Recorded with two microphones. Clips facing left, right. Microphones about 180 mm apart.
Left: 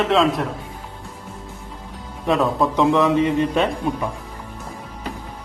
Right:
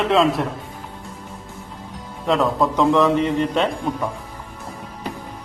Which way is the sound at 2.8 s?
15° left (ahead or behind).